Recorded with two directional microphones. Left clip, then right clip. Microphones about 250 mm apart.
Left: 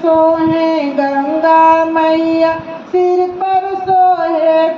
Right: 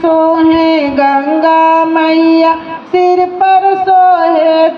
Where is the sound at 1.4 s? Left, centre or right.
Right.